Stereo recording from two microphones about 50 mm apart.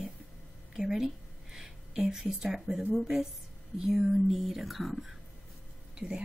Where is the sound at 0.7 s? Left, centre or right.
Centre.